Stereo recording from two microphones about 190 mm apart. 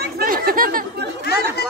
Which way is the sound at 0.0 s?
50° right (ahead or behind).